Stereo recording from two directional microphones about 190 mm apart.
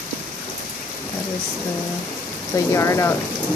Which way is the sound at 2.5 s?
15° left (ahead or behind).